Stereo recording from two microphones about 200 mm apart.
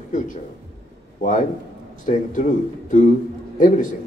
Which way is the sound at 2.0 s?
40° left (ahead or behind).